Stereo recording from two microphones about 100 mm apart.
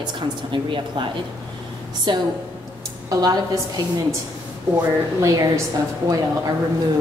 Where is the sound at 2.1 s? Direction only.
50° right (ahead or behind).